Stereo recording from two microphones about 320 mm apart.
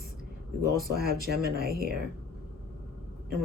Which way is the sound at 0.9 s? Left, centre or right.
Right.